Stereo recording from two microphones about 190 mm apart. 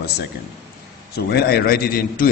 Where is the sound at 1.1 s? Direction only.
55° left (ahead or behind).